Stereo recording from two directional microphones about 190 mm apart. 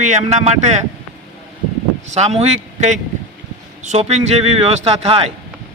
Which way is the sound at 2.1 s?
35° right (ahead or behind).